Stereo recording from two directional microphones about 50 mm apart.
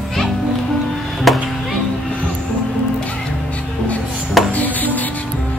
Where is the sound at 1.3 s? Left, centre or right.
Centre.